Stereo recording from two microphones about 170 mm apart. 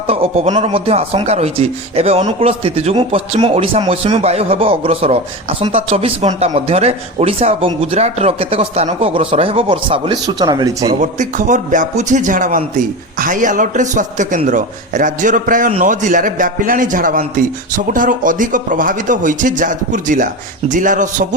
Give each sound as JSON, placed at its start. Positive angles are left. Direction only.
{"t": 0.1, "sound": "speech", "side_deg": -40}
{"t": 11.0, "sound": "a man's voice", "side_deg": -45}